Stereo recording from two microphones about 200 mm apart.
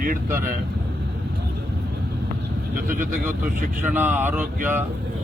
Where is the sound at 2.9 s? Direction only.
40° right (ahead or behind).